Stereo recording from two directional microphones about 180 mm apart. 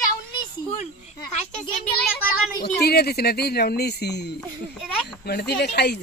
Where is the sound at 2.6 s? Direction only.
60° left (ahead or behind).